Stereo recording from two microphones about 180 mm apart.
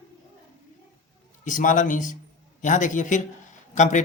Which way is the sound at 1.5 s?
45° left (ahead or behind).